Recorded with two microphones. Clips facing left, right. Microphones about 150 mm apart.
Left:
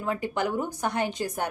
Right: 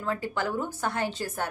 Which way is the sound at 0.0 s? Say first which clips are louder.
Left 2 dB; 15° left (ahead or behind).